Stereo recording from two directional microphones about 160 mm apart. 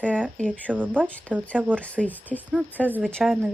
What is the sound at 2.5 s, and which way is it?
Speech, 10° right (ahead or behind).